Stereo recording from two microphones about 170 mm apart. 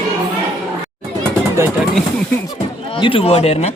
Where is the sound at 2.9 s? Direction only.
30° left (ahead or behind).